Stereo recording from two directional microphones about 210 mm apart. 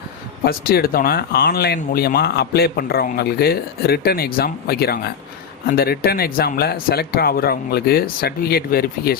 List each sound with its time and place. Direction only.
0.4 s speech: 45° left (ahead or behind)